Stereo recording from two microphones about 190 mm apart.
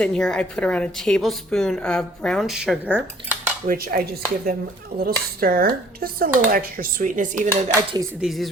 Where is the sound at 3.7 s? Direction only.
50° right (ahead or behind).